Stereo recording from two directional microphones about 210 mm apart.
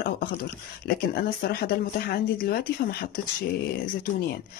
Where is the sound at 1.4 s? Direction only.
50° left (ahead or behind).